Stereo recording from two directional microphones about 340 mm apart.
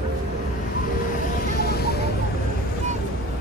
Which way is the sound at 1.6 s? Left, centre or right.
Left.